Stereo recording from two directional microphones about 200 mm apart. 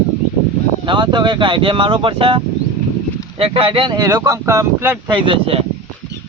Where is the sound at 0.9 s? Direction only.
20° right (ahead or behind).